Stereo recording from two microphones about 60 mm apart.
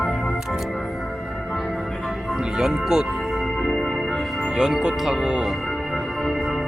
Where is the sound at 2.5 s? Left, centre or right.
Centre.